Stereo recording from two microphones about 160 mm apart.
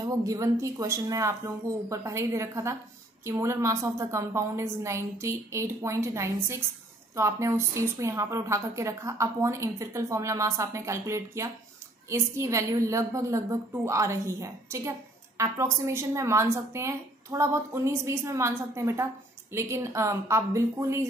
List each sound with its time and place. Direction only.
0.0 s a woman's voice: 20° right (ahead or behind)